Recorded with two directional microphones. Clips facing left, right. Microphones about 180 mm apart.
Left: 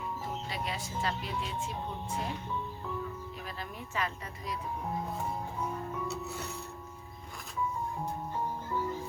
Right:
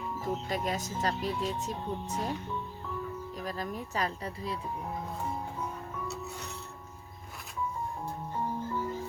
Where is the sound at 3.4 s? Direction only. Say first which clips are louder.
Right 6 dB; 40° right (ahead or behind).